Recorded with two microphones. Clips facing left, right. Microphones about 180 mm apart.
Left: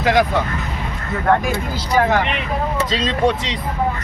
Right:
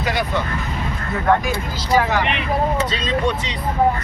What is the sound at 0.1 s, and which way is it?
Speech, 90° left.